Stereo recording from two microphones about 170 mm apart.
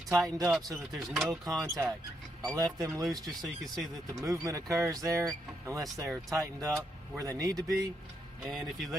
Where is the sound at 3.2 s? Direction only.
Centre (ahead or behind).